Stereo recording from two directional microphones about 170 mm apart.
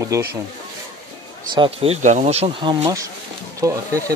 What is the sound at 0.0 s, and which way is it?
Speech, 15° right (ahead or behind).